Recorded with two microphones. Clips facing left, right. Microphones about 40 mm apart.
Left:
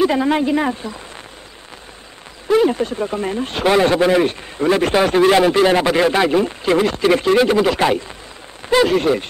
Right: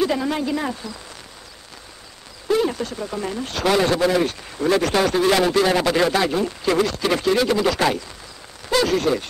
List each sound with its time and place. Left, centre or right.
0.0 s speech: left
2.4 s a sound: left
2.7 s speech: left